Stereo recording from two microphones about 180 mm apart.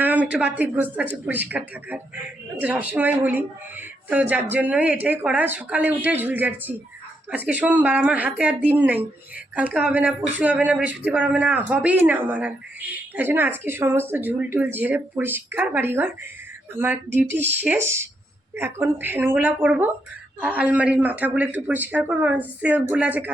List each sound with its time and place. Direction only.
0.0 s speech: 10° right (ahead or behind)